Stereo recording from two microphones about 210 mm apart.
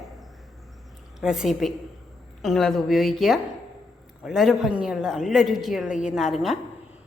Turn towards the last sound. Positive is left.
turn(degrees=0)  # may be behind; listen again after turning